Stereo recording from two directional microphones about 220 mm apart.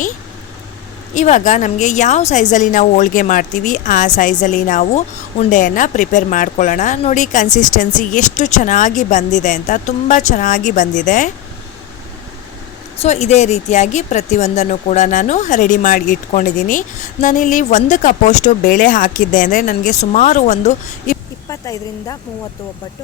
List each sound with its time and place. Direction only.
1.1 s a woman's voice: 35° left (ahead or behind)
13.0 s a woman's voice: 30° left (ahead or behind)
21.5 s speech: 15° left (ahead or behind)